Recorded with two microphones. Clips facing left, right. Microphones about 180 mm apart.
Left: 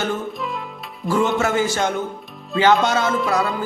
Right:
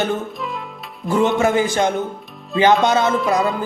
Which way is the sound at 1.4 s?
15° right (ahead or behind).